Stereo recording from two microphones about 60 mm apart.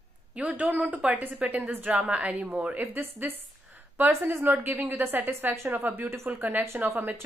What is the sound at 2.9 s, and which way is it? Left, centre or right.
A woman's voice, right.